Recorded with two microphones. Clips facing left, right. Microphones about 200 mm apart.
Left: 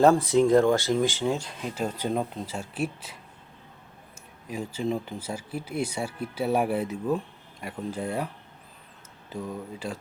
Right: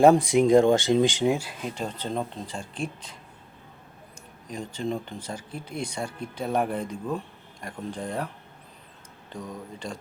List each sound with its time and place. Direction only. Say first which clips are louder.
0.0 s speech: right 2 dB; 15° right (ahead or behind)
1.7 s speech: left 4 dB; 10° left (ahead or behind)
4.4 s speech: left 2 dB; 5° left (ahead or behind)
9.3 s speech: left 3 dB; 5° left (ahead or behind)